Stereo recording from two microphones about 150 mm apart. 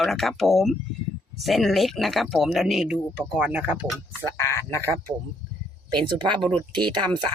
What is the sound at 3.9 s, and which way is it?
Speech, 20° left (ahead or behind).